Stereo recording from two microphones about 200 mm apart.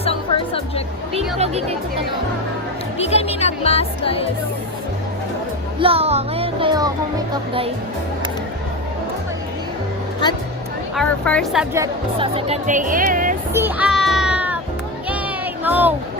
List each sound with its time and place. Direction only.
0.0 s music: 30° left (ahead or behind)
3.1 s speech: 30° left (ahead or behind)
5.8 s music: 30° right (ahead or behind)
10.9 s speech: 5° left (ahead or behind)
12.2 s speech: 25° right (ahead or behind)
13.5 s music: 10° right (ahead or behind)
15.6 s speech: 10° right (ahead or behind)